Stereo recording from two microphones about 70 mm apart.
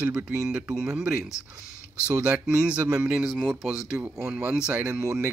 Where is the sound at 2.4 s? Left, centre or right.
Centre.